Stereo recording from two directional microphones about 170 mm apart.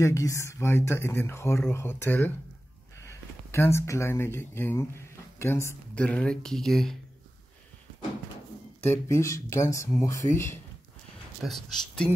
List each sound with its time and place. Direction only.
0.0 s speech: 20° left (ahead or behind); by 7.0 s centre (ahead or behind)
8.8 s speech: 15° left (ahead or behind)
11.4 s speech: 5° left (ahead or behind)